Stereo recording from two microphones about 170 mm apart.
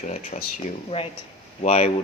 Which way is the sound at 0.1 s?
45° left (ahead or behind).